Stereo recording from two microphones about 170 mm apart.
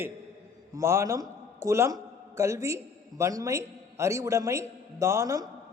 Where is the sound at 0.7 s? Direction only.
15° right (ahead or behind).